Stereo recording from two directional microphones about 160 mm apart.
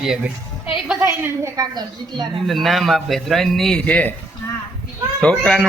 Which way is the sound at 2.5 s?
Centre (ahead or behind).